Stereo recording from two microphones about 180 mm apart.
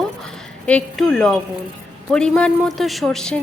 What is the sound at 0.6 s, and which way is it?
A woman's voice, 5° left (ahead or behind).